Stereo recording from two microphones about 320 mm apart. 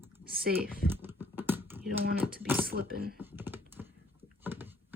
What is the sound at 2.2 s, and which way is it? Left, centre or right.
Speech, centre.